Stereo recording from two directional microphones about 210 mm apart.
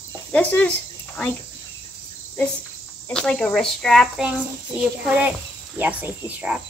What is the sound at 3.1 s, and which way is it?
Speech, 5° left (ahead or behind).